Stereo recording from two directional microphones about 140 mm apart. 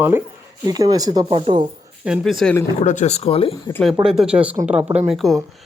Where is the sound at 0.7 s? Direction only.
30° right (ahead or behind).